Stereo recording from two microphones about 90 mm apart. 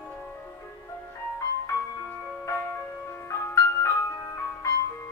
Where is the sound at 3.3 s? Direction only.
35° left (ahead or behind).